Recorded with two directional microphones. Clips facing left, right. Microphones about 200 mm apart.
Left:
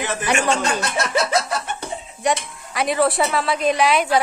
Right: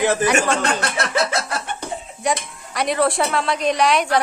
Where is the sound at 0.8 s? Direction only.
55° right (ahead or behind).